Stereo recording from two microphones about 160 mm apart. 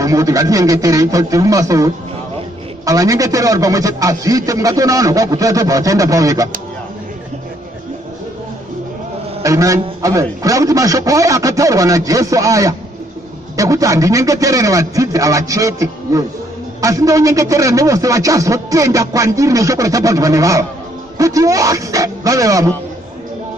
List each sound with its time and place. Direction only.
0.0 s a man's voice: 20° right (ahead or behind)
9.4 s a man's voice: 20° right (ahead or behind)